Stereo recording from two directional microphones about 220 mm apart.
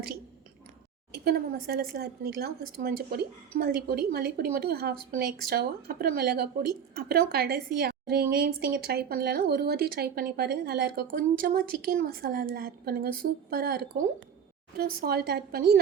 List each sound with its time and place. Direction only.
1.1 s a woman's voice: 45° right (ahead or behind)